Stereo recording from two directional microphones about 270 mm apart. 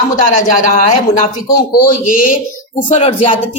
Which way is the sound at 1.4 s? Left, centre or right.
Left.